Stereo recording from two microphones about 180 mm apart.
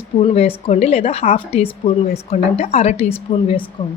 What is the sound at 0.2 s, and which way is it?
Speech, 35° left (ahead or behind).